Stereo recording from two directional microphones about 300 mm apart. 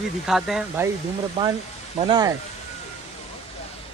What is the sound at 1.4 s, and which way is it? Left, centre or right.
Speech, centre.